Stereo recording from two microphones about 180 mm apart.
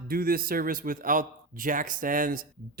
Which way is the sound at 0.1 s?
55° right (ahead or behind).